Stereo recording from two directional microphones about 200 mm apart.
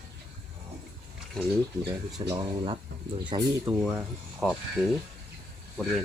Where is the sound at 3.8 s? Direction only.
5° right (ahead or behind).